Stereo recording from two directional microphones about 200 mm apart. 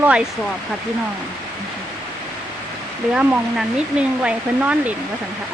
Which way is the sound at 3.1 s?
5° right (ahead or behind).